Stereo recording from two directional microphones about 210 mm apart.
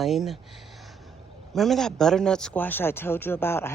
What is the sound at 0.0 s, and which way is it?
Speech, centre (ahead or behind).